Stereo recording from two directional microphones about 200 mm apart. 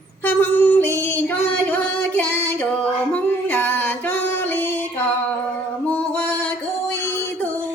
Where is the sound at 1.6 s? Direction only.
10° left (ahead or behind).